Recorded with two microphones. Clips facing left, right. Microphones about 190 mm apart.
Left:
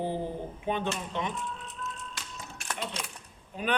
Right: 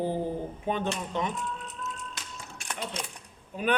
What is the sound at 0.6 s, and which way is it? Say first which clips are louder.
Speech: right 1 dB; 45° right (ahead or behind).